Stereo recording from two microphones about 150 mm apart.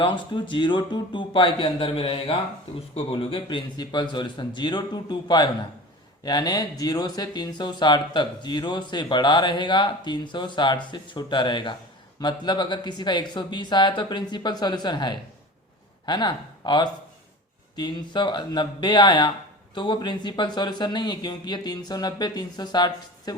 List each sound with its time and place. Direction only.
0.0 s speech: 35° left (ahead or behind)